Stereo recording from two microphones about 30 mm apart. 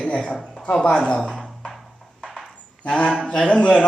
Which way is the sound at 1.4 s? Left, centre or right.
Centre.